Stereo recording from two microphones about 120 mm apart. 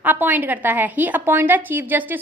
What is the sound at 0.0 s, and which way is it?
A woman's voice, 15° right (ahead or behind).